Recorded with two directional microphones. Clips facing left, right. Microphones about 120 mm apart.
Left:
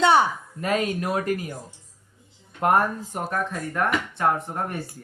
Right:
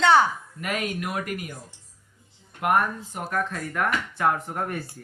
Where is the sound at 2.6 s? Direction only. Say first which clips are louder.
Left 2 dB; 35° left (ahead or behind).